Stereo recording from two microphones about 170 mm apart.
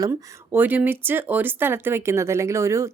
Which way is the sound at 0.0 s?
15° right (ahead or behind).